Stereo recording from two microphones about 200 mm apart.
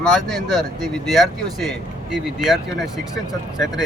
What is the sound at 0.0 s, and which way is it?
A man's voice, centre (ahead or behind).